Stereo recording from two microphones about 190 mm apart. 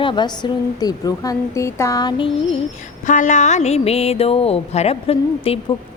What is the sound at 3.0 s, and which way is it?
Speech, 40° left (ahead or behind).